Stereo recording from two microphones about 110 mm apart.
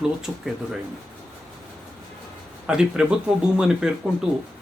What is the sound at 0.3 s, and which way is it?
Speech, 10° right (ahead or behind).